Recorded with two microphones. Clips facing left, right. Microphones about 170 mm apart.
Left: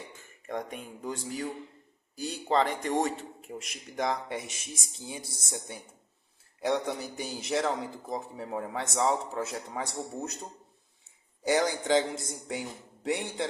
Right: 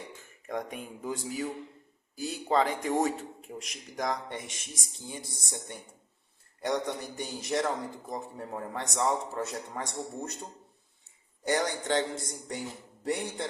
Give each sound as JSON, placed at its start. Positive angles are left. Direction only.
{"t": 0.4, "sound": "a man's voice", "side_deg": 0}
{"t": 11.4, "sound": "a man's voice", "side_deg": 5}